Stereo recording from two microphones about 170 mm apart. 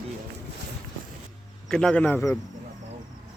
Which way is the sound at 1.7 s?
5° left (ahead or behind).